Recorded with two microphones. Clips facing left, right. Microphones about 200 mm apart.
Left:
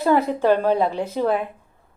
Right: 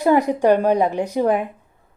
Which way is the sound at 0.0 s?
15° right (ahead or behind).